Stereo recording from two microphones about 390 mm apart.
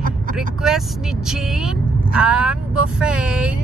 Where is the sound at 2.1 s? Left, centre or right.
Centre.